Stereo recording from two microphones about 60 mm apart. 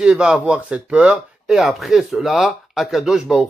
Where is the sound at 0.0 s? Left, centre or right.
Centre.